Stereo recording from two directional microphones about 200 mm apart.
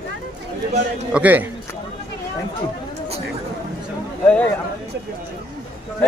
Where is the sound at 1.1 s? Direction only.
10° right (ahead or behind).